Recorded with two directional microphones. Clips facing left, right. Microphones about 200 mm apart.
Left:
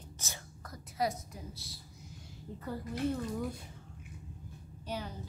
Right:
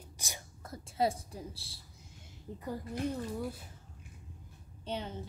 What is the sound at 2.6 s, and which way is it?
Speech, 15° right (ahead or behind).